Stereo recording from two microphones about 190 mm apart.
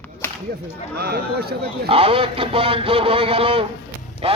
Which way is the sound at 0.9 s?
55° right (ahead or behind).